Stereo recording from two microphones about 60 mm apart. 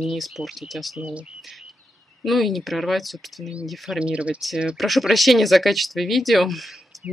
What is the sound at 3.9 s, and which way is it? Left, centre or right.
Speech, centre.